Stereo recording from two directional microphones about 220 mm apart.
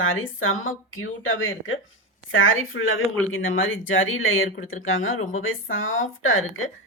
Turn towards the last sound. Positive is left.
turn(degrees=65)  # may be behind; listen again after turning